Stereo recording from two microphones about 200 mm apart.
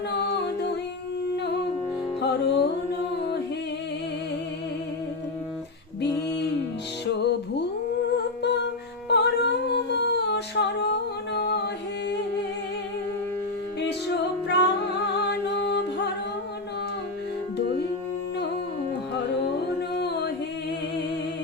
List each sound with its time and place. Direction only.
2.2 s music: 55° left (ahead or behind)
6.0 s a sound: 55° left (ahead or behind)
7.1 s music: 55° left (ahead or behind)
8.4 s a sound: 55° left (ahead or behind)
14.4 s music: 60° left (ahead or behind)
20.0 s music: 55° left (ahead or behind)